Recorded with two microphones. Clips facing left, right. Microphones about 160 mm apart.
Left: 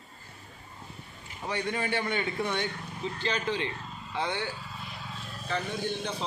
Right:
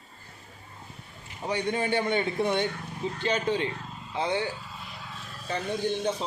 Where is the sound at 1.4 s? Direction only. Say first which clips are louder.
Right 3 dB; 20° right (ahead or behind).